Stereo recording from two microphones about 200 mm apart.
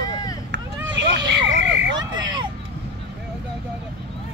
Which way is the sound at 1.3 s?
60° right (ahead or behind).